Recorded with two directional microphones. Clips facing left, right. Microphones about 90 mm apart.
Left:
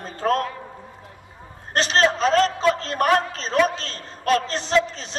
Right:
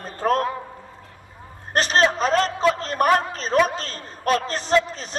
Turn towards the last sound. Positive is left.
turn(degrees=-5)  # may be behind; listen again after turning